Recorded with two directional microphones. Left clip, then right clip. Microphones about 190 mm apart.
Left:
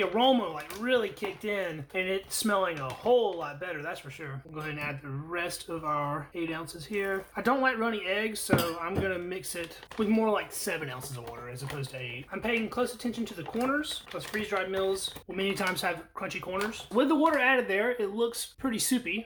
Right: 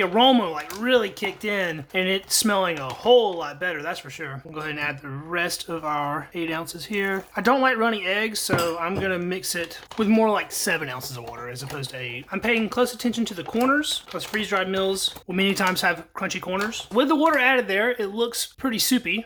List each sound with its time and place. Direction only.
0.0 s speech: 35° right (ahead or behind)